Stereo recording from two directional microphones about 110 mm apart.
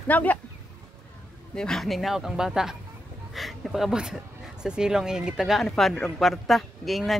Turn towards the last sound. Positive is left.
turn(degrees=0)  # may be behind; listen again after turning